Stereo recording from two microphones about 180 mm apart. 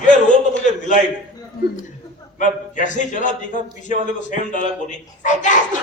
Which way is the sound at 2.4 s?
45° left (ahead or behind).